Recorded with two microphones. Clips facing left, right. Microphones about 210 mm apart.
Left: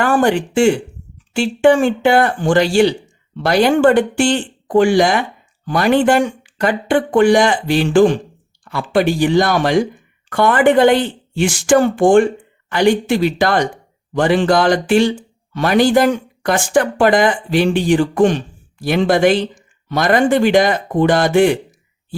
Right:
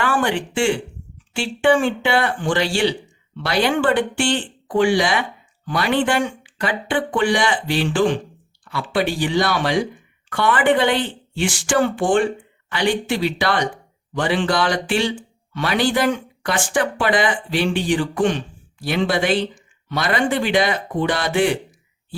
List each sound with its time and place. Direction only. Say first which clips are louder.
0.0 s speech: left 6 dB; 45° left (ahead or behind)